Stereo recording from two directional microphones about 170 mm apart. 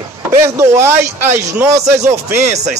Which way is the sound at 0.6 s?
15° right (ahead or behind).